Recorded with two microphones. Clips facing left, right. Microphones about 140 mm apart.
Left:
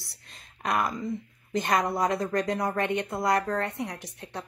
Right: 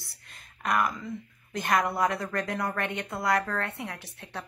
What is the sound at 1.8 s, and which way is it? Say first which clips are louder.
Speech: left 1 dB; 15° left (ahead or behind).